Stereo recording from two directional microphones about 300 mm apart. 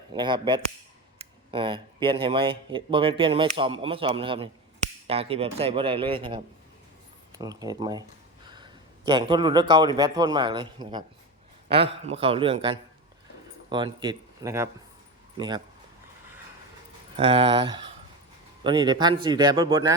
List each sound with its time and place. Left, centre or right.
0.1 s a man's voice: centre
17.2 s speech: centre